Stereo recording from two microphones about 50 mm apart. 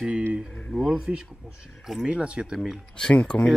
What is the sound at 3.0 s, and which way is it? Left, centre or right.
Speech, left.